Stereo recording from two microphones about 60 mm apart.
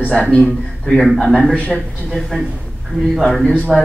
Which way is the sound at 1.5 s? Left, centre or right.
Left.